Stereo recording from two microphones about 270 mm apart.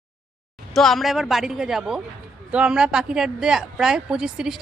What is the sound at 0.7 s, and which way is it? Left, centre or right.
Speech, centre.